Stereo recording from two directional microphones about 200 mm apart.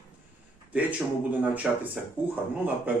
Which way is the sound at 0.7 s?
10° right (ahead or behind).